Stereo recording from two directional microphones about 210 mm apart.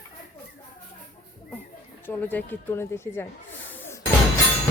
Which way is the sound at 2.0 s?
10° left (ahead or behind).